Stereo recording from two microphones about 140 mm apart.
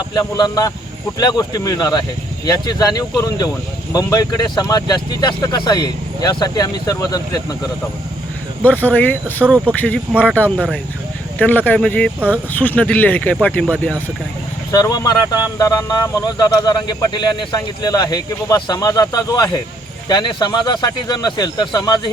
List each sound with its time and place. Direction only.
0.1 s speech: 30° left (ahead or behind)
8.6 s speech: 10° left (ahead or behind)
14.7 s speech: 25° left (ahead or behind)